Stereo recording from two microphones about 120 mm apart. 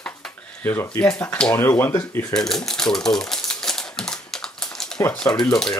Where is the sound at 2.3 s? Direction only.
5° left (ahead or behind).